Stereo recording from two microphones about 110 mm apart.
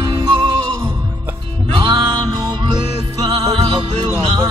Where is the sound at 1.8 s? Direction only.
45° right (ahead or behind).